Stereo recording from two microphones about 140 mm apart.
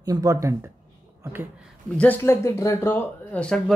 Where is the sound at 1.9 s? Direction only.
10° left (ahead or behind).